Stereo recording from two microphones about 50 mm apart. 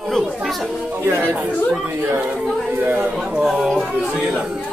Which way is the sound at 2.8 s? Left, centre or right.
Right.